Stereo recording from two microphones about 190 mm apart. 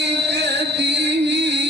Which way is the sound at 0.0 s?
65° right (ahead or behind).